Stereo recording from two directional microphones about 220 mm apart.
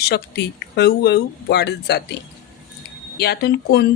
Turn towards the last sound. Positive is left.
turn(degrees=45)  # may be behind; listen again after turning